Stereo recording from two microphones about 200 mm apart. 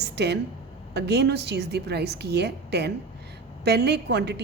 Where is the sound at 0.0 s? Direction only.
55° right (ahead or behind).